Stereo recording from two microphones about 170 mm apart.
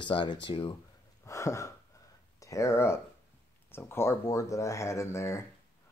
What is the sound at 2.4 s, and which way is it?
Speech, 20° left (ahead or behind).